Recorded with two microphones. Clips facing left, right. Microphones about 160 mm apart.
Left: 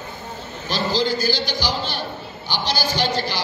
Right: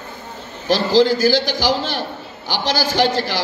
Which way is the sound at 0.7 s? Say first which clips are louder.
Right 7 dB; 90° right.